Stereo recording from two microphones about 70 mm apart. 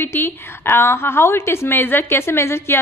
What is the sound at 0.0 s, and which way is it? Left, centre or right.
A woman's voice, left.